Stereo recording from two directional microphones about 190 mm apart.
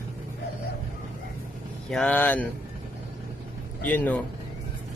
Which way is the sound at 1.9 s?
5° left (ahead or behind).